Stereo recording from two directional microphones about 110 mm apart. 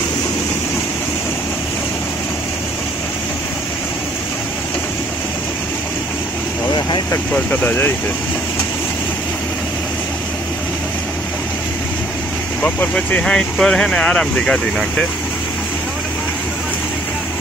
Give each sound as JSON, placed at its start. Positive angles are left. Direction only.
{"t": 7.3, "sound": "speech", "side_deg": 20}
{"t": 12.6, "sound": "speech", "side_deg": 15}